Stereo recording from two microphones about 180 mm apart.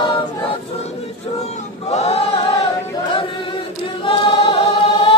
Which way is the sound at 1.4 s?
35° left (ahead or behind).